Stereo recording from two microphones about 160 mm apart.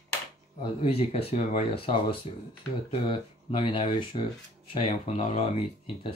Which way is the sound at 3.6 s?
35° left (ahead or behind).